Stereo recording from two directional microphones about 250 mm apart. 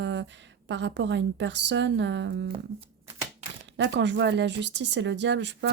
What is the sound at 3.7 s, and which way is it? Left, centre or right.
Speech, right.